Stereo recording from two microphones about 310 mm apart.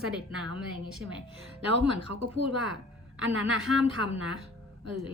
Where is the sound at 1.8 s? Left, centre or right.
Centre.